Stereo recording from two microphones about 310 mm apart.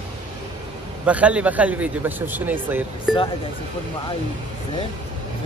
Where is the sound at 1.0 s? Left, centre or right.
Centre.